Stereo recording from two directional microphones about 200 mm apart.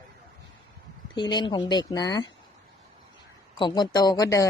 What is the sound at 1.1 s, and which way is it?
Speech, 20° left (ahead or behind).